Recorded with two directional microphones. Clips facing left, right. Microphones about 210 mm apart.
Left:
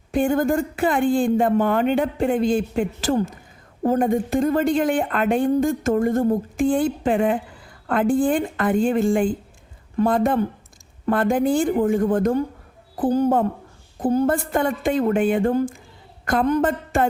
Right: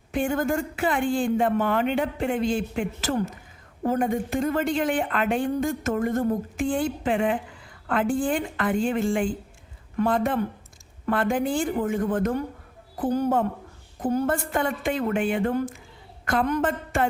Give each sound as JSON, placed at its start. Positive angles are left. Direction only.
{"t": 0.1, "sound": "a woman's voice", "side_deg": 35}